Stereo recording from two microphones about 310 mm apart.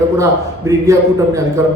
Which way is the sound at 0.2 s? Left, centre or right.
Centre.